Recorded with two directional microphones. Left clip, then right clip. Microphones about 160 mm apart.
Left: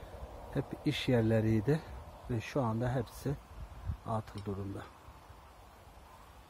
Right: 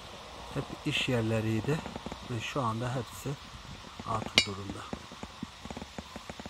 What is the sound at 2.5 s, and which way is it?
Speech, 15° left (ahead or behind).